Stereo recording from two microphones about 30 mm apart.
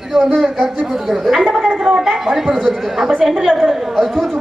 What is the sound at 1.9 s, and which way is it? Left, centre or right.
Speech, centre.